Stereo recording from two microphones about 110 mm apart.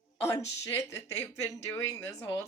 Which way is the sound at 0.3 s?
30° left (ahead or behind).